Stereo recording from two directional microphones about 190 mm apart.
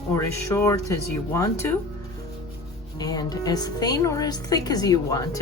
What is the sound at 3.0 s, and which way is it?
Speech, 20° left (ahead or behind).